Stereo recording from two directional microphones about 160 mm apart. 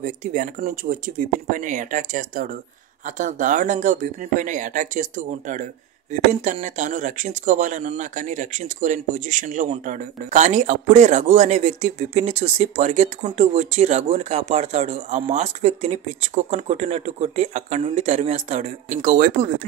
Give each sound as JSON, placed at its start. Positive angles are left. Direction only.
{"t": 0.0, "sound": "speech", "side_deg": -55}